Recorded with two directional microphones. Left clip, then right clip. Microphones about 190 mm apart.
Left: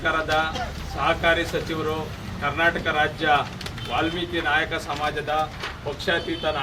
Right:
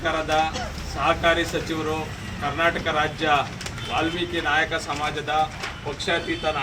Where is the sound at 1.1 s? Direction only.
10° left (ahead or behind).